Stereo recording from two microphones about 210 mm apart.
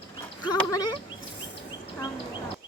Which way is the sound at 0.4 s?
15° left (ahead or behind).